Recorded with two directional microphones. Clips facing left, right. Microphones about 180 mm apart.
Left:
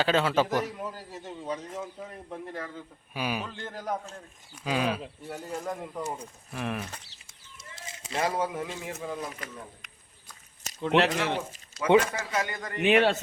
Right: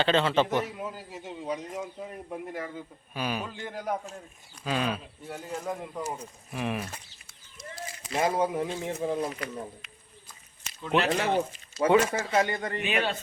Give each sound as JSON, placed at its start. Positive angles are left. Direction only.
{"t": 0.0, "sound": "a man's voice", "side_deg": 5}
{"t": 3.1, "sound": "a man's voice", "side_deg": 10}
{"t": 3.4, "sound": "speech", "side_deg": -5}
{"t": 4.6, "sound": "speech", "side_deg": 10}
{"t": 7.9, "sound": "a sound", "side_deg": 25}
{"t": 8.1, "sound": "speech", "side_deg": -25}
{"t": 10.8, "sound": "speech", "side_deg": 70}
{"t": 12.1, "sound": "speech", "side_deg": -25}
{"t": 12.8, "sound": "speech", "side_deg": 75}